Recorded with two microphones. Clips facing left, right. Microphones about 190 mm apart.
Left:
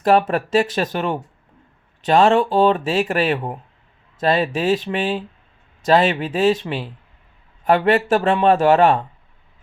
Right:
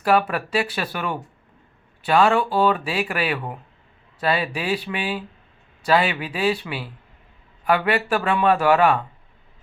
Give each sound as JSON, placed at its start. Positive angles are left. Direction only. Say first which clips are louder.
{"t": 0.0, "sound": "speech", "louder": "left 4 dB", "side_deg": 35}
{"t": 0.9, "sound": "speech", "louder": "left 3 dB", "side_deg": 25}
{"t": 2.0, "sound": "speech", "louder": "left 3 dB", "side_deg": 40}
{"t": 3.3, "sound": "speech", "louder": "left 4 dB", "side_deg": 30}
{"t": 4.2, "sound": "speech", "louder": "left 5 dB", "side_deg": 40}